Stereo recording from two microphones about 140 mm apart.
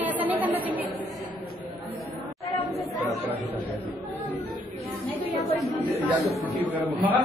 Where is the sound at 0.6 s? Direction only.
10° right (ahead or behind).